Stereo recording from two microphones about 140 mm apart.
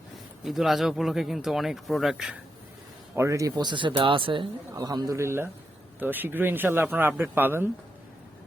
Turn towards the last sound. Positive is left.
turn(degrees=-15)  # may be behind; listen again after turning